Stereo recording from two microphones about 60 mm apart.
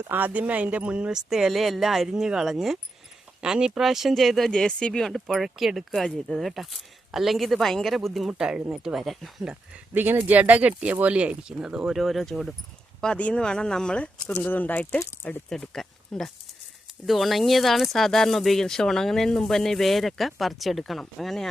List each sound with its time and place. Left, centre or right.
0.1 s speech: right
1.1 s speech: centre
5.3 s speech: centre
9.9 s speech: right; by 11.9 s centre
11.9 s speech: centre
13.1 s speech: left
15.4 s speech: centre